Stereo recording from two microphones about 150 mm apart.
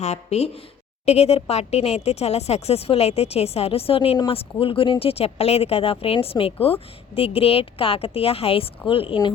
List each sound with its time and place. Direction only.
0.0 s speech: 45° left (ahead or behind)